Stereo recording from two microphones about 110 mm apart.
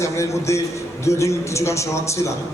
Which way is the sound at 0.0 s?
25° left (ahead or behind).